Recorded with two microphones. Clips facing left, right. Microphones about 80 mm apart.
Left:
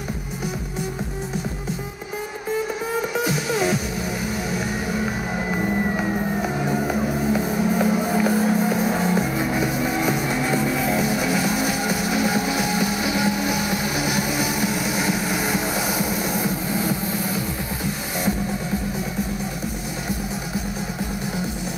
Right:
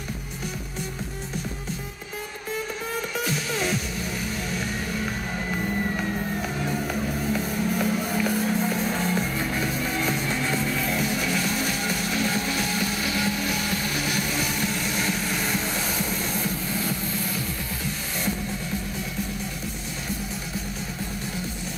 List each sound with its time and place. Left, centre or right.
2.5 s music: centre